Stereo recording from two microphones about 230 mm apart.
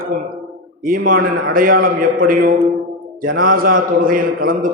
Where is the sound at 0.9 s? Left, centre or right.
Right.